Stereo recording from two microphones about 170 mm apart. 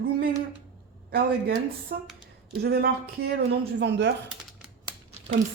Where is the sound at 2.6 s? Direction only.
70° right (ahead or behind).